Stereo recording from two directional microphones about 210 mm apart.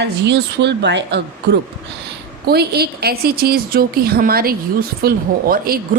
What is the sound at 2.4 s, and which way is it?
A woman's voice, 50° right (ahead or behind).